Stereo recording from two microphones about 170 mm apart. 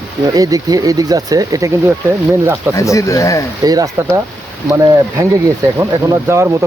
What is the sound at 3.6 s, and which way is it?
Speech, 20° right (ahead or behind).